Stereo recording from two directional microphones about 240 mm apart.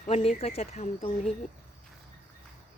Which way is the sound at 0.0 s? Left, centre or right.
Left.